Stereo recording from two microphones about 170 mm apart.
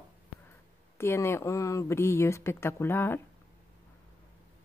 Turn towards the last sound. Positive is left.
turn(degrees=15)  # may be behind; listen again after turning